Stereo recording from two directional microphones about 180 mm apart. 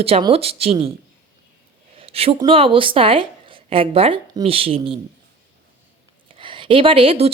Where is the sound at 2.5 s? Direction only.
30° right (ahead or behind).